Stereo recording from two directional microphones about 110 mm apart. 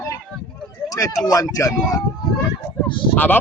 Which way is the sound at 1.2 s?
30° left (ahead or behind).